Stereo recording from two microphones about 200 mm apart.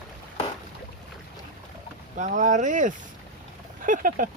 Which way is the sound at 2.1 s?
40° right (ahead or behind).